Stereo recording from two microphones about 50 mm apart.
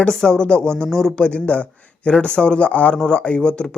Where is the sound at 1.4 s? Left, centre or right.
Left.